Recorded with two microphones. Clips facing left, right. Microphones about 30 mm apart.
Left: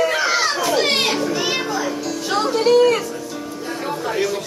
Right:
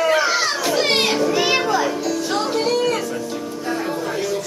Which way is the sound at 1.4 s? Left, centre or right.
Right.